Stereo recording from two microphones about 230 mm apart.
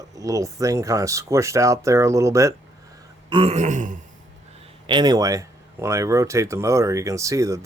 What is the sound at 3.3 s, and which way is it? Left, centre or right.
Throat clearing, right.